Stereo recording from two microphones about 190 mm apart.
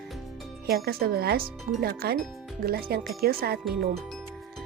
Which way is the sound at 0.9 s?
55° right (ahead or behind).